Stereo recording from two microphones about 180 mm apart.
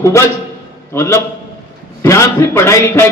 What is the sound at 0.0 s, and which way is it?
A man's voice, 15° left (ahead or behind).